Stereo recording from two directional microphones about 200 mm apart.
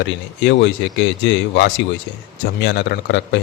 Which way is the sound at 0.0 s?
65° left (ahead or behind).